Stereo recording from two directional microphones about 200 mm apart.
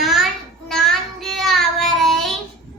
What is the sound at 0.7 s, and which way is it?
Child singing, centre (ahead or behind).